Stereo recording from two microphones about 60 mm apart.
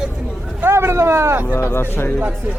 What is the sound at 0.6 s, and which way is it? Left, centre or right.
Speech, right.